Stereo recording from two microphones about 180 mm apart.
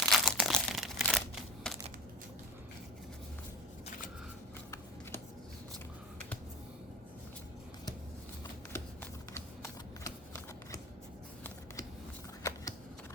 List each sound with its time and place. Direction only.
0.0 s crumpling: centre (ahead or behind)
9.3 s a sound: 15° left (ahead or behind)
12.4 s shuffling cards: 15° left (ahead or behind)